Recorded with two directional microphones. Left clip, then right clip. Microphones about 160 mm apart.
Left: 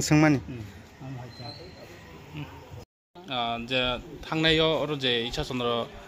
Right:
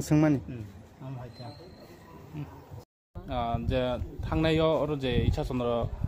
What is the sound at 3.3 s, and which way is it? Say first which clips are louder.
A man's voice: left 2 dB; 60° right (ahead or behind).